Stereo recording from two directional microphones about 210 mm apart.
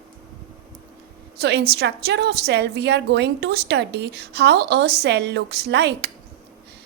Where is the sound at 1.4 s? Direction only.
50° right (ahead or behind).